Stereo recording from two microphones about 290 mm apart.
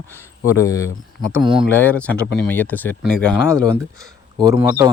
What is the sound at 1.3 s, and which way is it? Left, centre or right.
Speech, centre.